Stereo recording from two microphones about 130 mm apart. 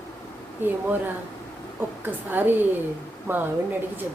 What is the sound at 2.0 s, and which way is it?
Speech, 15° right (ahead or behind).